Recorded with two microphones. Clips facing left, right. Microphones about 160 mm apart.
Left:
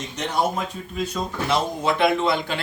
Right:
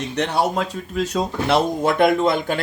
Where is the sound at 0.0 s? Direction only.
70° right (ahead or behind).